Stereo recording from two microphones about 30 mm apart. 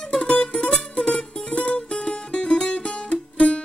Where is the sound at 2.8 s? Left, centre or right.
Left.